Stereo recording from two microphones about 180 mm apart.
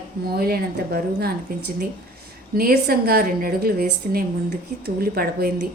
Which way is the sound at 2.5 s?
55° right (ahead or behind).